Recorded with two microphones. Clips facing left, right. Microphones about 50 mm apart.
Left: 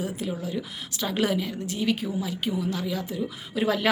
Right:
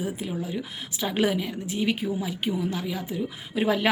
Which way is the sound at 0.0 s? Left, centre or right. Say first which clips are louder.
Even; centre.